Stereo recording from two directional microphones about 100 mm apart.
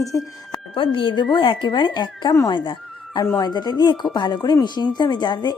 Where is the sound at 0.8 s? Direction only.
55° left (ahead or behind).